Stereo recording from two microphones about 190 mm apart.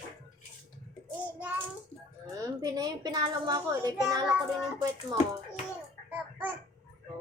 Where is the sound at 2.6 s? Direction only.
20° right (ahead or behind).